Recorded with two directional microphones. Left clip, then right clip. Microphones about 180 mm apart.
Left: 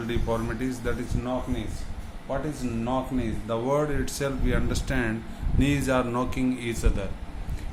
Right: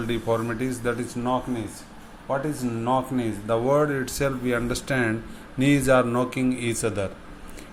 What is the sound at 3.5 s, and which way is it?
A man's voice, 20° right (ahead or behind).